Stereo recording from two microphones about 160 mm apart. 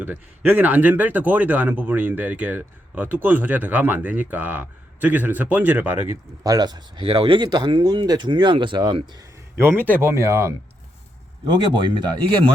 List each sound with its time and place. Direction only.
0.0 s speech: 10° right (ahead or behind)
6.4 s speech: 25° right (ahead or behind)
9.6 s speech: 15° right (ahead or behind)
11.4 s speech: 30° right (ahead or behind)